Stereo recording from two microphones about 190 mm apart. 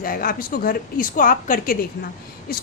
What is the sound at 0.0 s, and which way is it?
A woman's voice, 50° left (ahead or behind).